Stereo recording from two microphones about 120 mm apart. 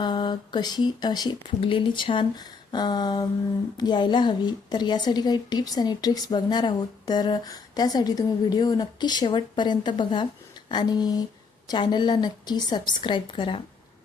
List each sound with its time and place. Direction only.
0.0 s a woman's voice: 40° left (ahead or behind)